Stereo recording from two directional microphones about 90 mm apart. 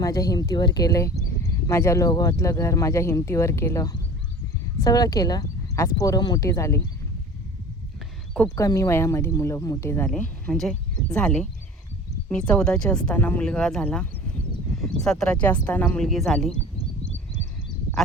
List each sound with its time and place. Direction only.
0.0 s speech: 40° left (ahead or behind)
8.5 s speech: 35° left (ahead or behind)
10.5 s speech: 5° left (ahead or behind)
13.1 s speech: 20° left (ahead or behind)
16.0 s speech: centre (ahead or behind)